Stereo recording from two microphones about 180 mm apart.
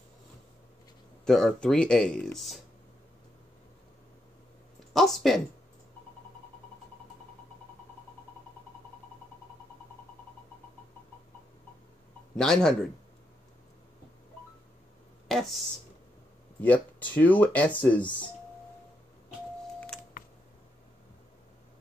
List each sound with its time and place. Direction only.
1.2 s speech: 5° left (ahead or behind)
4.9 s speech: centre (ahead or behind)
12.4 s speech: 5° left (ahead or behind)
15.2 s speech: centre (ahead or behind)
16.6 s speech: 10° left (ahead or behind)
18.0 s speech: 25° left (ahead or behind)
20.2 s telephone dialing: 50° left (ahead or behind)